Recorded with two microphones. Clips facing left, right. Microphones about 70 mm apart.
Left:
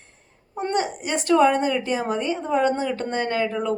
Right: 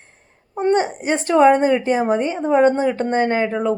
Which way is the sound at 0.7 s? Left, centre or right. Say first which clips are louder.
Right 6 dB; right.